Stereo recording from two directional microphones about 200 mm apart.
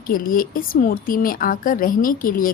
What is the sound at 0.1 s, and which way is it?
A woman's voice, 45° left (ahead or behind).